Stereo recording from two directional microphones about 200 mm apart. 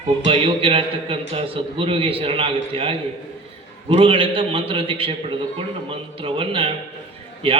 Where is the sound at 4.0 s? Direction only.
25° right (ahead or behind).